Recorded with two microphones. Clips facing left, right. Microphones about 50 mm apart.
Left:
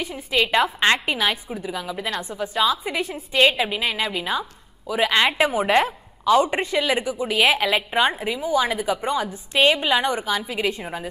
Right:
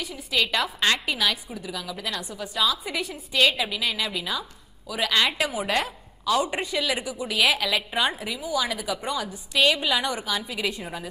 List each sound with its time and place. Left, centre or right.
0.0 s a woman's voice: left
3.3 s a woman's voice: left